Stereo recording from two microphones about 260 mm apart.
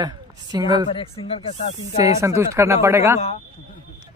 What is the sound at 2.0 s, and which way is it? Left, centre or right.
Speech, centre.